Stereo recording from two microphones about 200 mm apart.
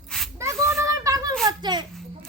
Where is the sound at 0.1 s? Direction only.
5° left (ahead or behind).